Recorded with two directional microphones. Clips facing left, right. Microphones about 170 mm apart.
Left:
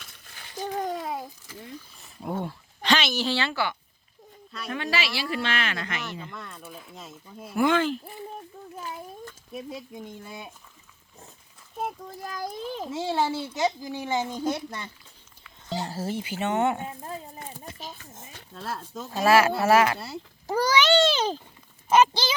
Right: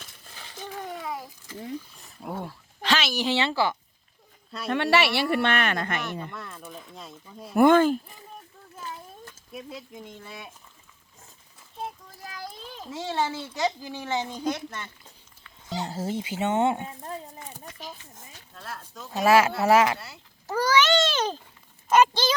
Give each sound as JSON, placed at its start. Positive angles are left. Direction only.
{"t": 0.6, "sound": "a sound", "side_deg": 35}
{"t": 2.0, "sound": "a sound", "side_deg": 0}
{"t": 3.2, "sound": "speech", "side_deg": -20}
{"t": 4.7, "sound": "speech", "side_deg": -70}
{"t": 6.3, "sound": "speech", "side_deg": 0}
{"t": 7.5, "sound": "speech", "side_deg": -50}
{"t": 9.6, "sound": "speech", "side_deg": 20}
{"t": 11.8, "sound": "a child's voice", "side_deg": 45}
{"t": 13.1, "sound": "a child's voice", "side_deg": 5}
{"t": 15.7, "sound": "speech", "side_deg": -20}
{"t": 16.8, "sound": "speech", "side_deg": 20}
{"t": 19.1, "sound": "speech", "side_deg": -20}
{"t": 20.5, "sound": "a child's voice", "side_deg": 15}